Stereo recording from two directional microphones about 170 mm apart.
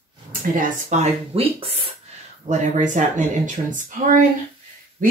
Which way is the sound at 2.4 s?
45° right (ahead or behind).